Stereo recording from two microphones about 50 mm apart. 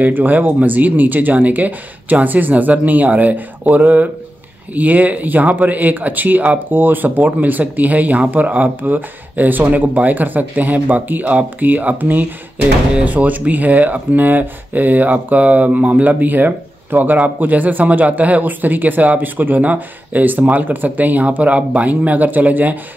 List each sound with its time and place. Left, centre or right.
0.0 s speech: right